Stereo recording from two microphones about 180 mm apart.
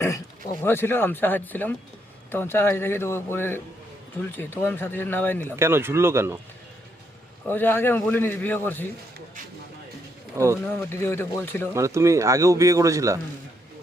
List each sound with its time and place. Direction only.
0.6 s a man's voice: 10° left (ahead or behind)
5.5 s speech: 15° right (ahead or behind)
7.4 s a man's voice: 10° left (ahead or behind)
10.3 s speech: 15° right (ahead or behind)
10.7 s a man's voice: 15° left (ahead or behind)
11.7 s speech: 15° right (ahead or behind)